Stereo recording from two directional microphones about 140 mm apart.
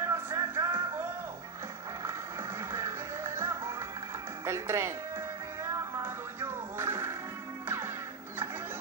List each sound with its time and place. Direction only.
0.0 s music: 20° right (ahead or behind)
2.7 s music: 20° right (ahead or behind)
4.5 s speech: 20° right (ahead or behind)
5.6 s music: 20° right (ahead or behind)